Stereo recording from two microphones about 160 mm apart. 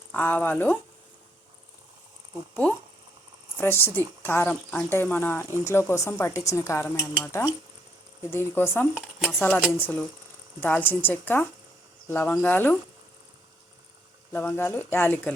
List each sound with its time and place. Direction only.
0.1 s speech: 10° left (ahead or behind)
3.6 s speech: 15° left (ahead or behind)
9.0 s speech: 5° right (ahead or behind)
9.7 s speech: 10° left (ahead or behind)
14.3 s speech: 15° left (ahead or behind)